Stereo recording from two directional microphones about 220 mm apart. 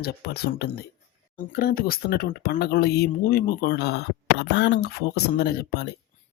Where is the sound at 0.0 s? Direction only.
45° left (ahead or behind).